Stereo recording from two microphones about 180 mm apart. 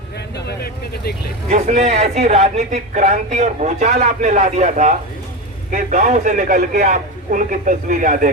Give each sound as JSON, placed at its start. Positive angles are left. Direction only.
{"t": 0.3, "sound": "vehicle", "side_deg": 65}
{"t": 1.5, "sound": "a man's voice", "side_deg": -40}